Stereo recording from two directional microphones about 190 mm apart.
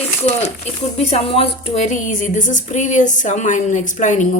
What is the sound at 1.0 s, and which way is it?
A woman's voice, 30° left (ahead or behind).